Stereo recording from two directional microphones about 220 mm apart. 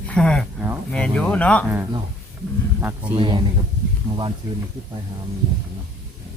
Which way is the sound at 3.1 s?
20° right (ahead or behind).